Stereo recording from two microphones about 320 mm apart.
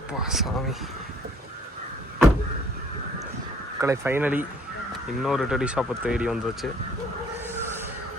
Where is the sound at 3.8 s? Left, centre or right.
Centre.